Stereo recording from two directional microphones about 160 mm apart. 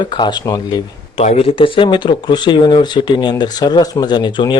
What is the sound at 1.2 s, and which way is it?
Speech, 40° left (ahead or behind).